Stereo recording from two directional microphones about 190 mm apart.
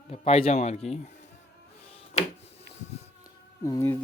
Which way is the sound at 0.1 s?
30° left (ahead or behind).